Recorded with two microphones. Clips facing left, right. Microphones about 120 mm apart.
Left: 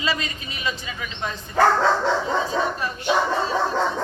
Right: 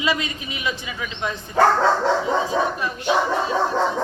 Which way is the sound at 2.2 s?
15° right (ahead or behind).